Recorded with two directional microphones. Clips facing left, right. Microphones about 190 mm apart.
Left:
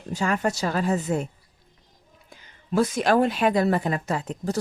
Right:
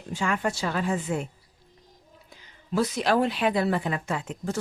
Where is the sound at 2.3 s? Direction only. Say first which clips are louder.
Left 3 dB; 50° left (ahead or behind).